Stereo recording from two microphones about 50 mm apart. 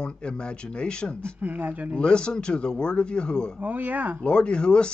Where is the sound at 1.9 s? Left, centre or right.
Centre.